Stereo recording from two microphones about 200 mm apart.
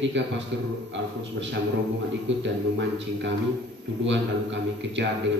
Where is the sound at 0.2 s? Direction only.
65° right (ahead or behind).